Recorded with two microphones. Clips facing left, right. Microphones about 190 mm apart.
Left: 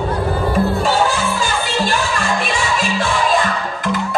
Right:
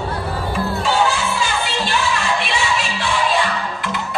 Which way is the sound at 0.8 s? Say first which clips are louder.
Left 2 dB; 45° left (ahead or behind).